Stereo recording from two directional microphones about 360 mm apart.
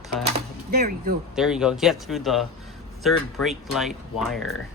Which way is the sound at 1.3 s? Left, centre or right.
Centre.